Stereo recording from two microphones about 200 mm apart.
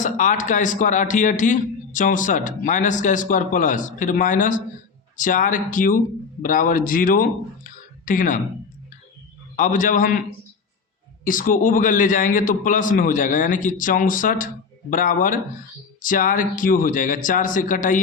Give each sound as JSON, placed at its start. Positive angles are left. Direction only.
{"t": 0.0, "sound": "a man's voice", "side_deg": 40}
{"t": 9.6, "sound": "a man's voice", "side_deg": 40}
{"t": 11.3, "sound": "a man's voice", "side_deg": 40}